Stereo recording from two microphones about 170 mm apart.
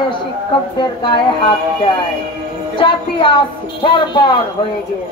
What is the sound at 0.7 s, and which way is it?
Speech, 30° left (ahead or behind).